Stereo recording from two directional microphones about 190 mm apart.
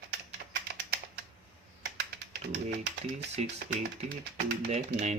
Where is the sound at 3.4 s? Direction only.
35° right (ahead or behind).